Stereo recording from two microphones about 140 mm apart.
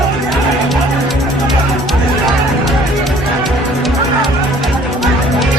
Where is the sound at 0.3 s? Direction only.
Centre (ahead or behind).